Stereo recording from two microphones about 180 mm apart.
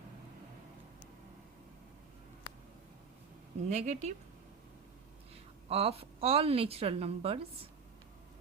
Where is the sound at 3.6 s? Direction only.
40° right (ahead or behind).